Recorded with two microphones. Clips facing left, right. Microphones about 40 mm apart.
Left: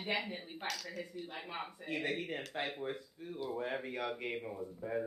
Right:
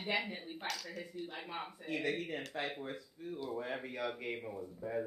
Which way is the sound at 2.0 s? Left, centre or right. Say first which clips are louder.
Right 1 dB; left.